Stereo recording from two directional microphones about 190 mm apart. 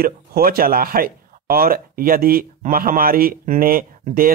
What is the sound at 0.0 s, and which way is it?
Speech, 50° right (ahead or behind).